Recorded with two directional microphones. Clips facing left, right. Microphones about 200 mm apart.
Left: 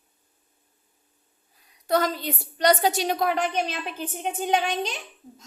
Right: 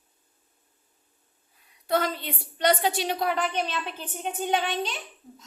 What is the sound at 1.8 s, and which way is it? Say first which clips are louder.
A woman's voice: left 3 dB; 40° left (ahead or behind).